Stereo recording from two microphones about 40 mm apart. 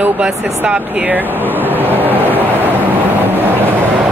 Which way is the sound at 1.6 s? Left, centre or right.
Right.